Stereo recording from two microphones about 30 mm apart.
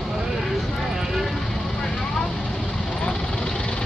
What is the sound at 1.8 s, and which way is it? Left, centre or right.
Vehicle, left.